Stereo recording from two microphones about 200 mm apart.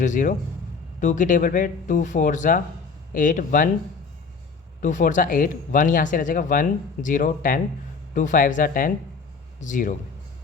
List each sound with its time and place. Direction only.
0.0 s speech: 40° left (ahead or behind)
4.8 s speech: 40° left (ahead or behind)